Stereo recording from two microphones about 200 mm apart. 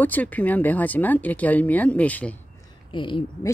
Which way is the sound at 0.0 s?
10° left (ahead or behind).